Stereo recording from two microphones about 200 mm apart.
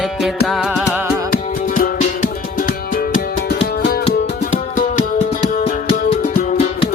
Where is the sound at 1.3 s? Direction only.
45° left (ahead or behind).